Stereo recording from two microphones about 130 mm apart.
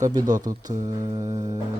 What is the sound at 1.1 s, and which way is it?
Music, 40° right (ahead or behind).